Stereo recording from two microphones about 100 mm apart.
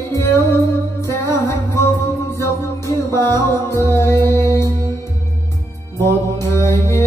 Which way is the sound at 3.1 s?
25° left (ahead or behind).